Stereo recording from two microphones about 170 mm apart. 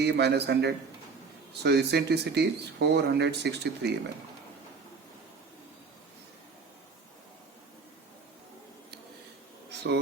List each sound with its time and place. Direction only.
0.0 s speech: 85° right